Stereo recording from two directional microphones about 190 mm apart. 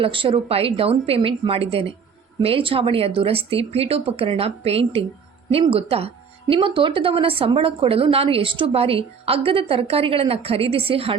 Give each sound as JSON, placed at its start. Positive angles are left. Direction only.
{"t": 0.0, "sound": "a woman's voice", "side_deg": -30}